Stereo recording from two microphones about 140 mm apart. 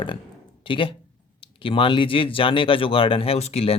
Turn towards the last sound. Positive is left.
turn(degrees=45)  # may be behind; listen again after turning